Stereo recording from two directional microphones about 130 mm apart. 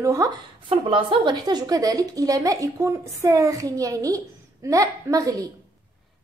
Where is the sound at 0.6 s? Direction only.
40° right (ahead or behind); by 5.5 s 25° right (ahead or behind).